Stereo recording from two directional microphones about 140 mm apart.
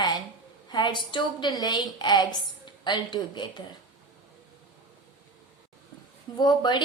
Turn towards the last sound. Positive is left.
turn(degrees=30)  # may be behind; listen again after turning